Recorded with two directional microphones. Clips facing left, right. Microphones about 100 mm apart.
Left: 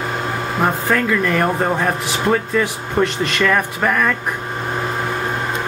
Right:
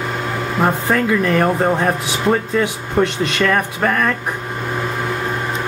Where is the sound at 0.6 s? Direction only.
5° right (ahead or behind).